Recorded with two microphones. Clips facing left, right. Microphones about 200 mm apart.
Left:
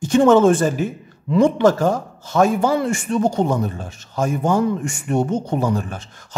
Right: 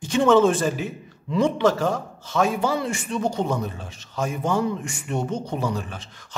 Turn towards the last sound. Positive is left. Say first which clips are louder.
# left 5 dB
turn(degrees=45)  # may be behind; listen again after turning